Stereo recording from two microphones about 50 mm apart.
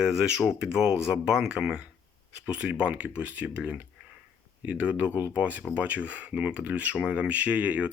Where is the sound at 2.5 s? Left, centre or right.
Right.